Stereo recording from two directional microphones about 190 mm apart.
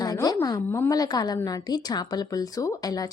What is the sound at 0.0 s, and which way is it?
A woman's voice, 20° left (ahead or behind).